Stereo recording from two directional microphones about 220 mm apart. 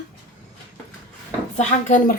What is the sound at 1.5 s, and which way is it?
Speech, 35° left (ahead or behind).